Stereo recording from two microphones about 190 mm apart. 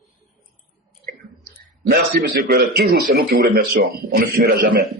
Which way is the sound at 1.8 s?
50° right (ahead or behind).